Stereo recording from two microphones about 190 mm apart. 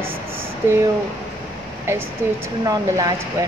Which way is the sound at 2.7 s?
20° right (ahead or behind).